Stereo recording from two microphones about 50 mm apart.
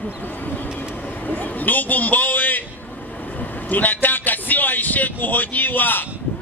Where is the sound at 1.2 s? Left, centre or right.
Left.